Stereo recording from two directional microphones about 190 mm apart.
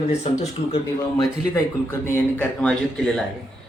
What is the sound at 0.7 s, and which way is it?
Speech, 20° left (ahead or behind).